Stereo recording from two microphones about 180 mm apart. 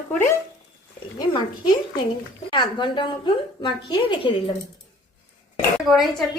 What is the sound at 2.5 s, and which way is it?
A woman's voice, 25° left (ahead or behind).